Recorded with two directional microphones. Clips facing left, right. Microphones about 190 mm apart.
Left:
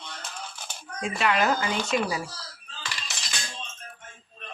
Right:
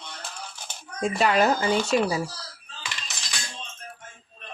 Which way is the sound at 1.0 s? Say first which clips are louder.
Right 4 dB; 40° right (ahead or behind).